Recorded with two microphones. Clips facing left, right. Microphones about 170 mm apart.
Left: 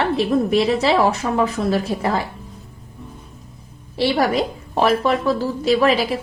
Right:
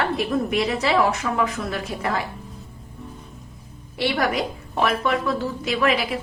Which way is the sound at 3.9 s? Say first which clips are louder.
Left 5 dB; 30° left (ahead or behind).